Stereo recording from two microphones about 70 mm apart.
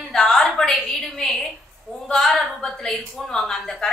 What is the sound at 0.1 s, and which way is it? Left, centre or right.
A woman's voice, centre.